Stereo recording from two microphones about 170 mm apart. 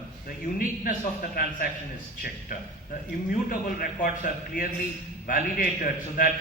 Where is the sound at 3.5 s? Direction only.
55° left (ahead or behind).